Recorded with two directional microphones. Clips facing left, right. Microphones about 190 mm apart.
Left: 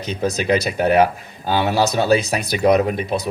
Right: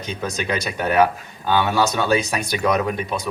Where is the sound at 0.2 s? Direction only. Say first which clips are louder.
Left 7 dB; 30° left (ahead or behind).